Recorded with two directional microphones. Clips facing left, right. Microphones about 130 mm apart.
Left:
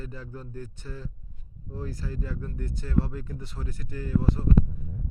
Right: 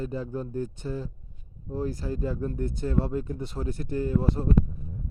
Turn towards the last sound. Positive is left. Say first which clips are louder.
# right 1 dB
turn(degrees=-25)  # may be behind; listen again after turning